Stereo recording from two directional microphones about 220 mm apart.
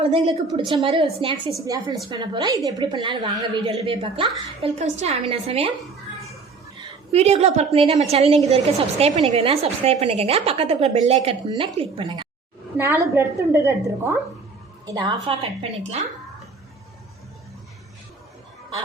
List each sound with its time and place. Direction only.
0.7 s a woman's voice: 25° right (ahead or behind)
7.1 s a woman's voice: 30° right (ahead or behind); by 14.2 s 10° right (ahead or behind)
14.8 s a woman's voice: 25° right (ahead or behind)